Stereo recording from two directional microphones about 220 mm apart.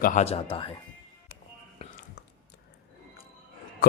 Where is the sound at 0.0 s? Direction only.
35° left (ahead or behind).